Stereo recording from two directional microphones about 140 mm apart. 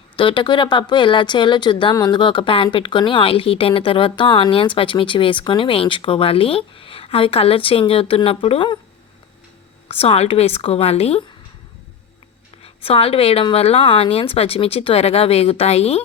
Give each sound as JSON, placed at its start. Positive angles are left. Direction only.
{"t": 0.2, "sound": "speech", "side_deg": 35}
{"t": 9.9, "sound": "a woman's voice", "side_deg": 45}
{"t": 12.6, "sound": "a woman's voice", "side_deg": 45}